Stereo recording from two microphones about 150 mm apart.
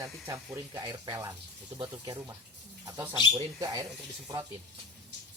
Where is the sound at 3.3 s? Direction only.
25° right (ahead or behind).